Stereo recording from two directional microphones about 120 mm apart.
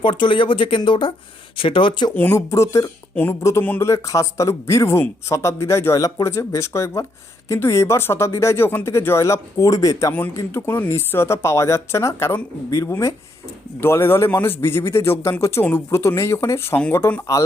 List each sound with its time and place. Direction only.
0.0 s speech: 45° left (ahead or behind)
2.1 s speech: 20° left (ahead or behind)
10.1 s speech: 15° left (ahead or behind)